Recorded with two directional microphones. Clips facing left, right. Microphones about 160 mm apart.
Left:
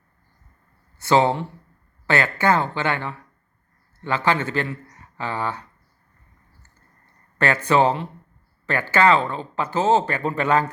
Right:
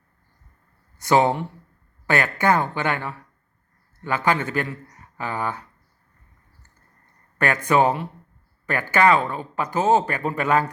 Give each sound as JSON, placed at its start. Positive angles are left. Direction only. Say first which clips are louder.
{"t": 1.0, "sound": "speech", "louder": "even", "side_deg": -15}
{"t": 7.3, "sound": "speech", "louder": "left 1 dB", "side_deg": -15}